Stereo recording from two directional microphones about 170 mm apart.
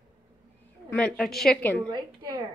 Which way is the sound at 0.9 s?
5° left (ahead or behind).